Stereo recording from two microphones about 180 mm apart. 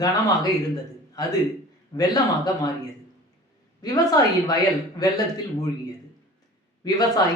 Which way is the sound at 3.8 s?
20° left (ahead or behind).